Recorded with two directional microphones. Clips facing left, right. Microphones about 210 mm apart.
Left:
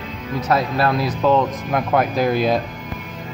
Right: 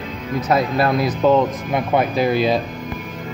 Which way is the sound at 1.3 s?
5° right (ahead or behind).